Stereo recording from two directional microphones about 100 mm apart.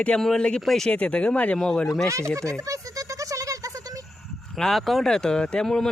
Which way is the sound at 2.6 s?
35° right (ahead or behind).